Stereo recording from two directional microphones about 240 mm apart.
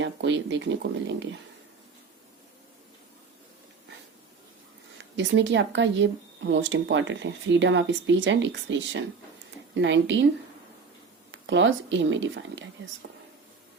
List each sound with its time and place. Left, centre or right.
0.0 s speech: right
5.1 s speech: right
11.3 s speech: right